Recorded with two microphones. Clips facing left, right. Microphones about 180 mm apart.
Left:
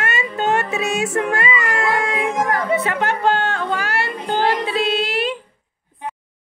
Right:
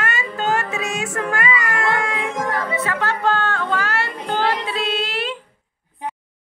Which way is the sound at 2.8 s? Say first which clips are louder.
Left 2 dB; 15° left (ahead or behind).